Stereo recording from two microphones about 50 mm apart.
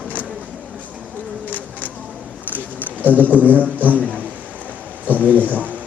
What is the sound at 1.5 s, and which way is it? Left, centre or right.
Bird, left.